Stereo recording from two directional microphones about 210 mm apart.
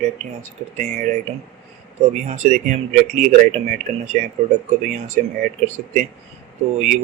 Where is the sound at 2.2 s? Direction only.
35° right (ahead or behind).